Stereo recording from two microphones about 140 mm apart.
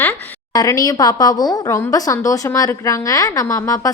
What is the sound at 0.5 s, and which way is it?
A woman's voice, 25° left (ahead or behind).